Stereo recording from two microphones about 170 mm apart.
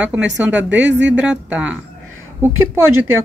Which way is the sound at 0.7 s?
90° right.